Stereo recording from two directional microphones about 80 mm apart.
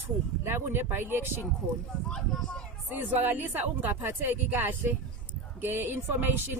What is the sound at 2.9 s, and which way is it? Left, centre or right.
Speech, right.